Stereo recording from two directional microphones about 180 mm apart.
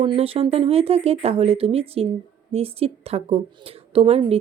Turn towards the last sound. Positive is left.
turn(degrees=-35)  # may be behind; listen again after turning